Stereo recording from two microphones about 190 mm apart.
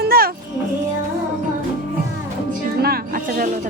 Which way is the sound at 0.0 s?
55° right (ahead or behind).